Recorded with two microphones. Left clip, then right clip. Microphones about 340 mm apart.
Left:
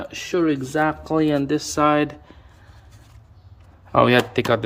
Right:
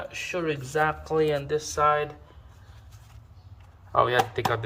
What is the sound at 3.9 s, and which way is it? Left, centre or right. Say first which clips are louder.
Speech: left 6 dB; left.